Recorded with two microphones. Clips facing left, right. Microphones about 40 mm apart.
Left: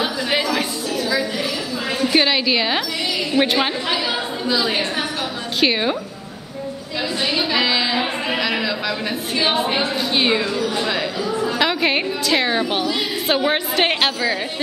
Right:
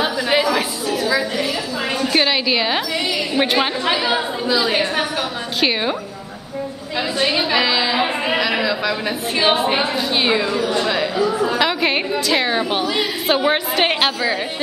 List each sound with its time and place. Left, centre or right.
0.0 s a sound: centre
2.0 s a woman's voice: centre
3.8 s chatter: centre
4.5 s a woman's voice: centre
7.2 s a woman's voice: centre
7.6 s a sound: centre
9.9 s a woman's voice: centre
10.7 s a woman's voice: centre